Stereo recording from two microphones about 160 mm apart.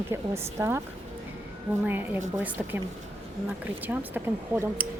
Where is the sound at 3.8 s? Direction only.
10° right (ahead or behind).